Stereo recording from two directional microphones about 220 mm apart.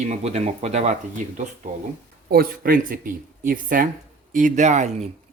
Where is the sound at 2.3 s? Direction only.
45° right (ahead or behind).